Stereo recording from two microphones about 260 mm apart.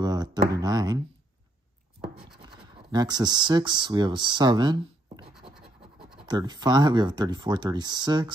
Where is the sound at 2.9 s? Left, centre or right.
Centre.